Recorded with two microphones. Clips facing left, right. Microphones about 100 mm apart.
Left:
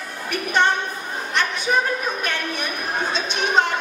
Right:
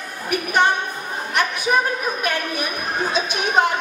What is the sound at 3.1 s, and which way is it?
Chatter, 10° right (ahead or behind).